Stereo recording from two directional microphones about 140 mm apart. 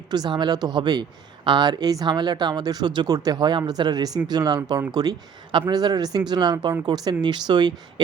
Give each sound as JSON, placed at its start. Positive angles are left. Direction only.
{"t": 0.1, "sound": "speech", "side_deg": -30}